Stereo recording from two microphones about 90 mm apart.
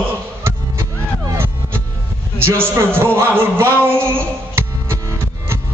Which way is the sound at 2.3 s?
25° right (ahead or behind).